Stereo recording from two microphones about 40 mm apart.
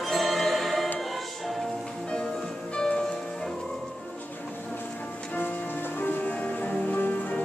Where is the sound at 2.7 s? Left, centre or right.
Centre.